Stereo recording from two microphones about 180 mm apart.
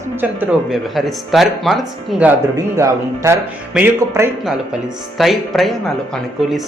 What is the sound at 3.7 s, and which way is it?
Speech, 15° right (ahead or behind).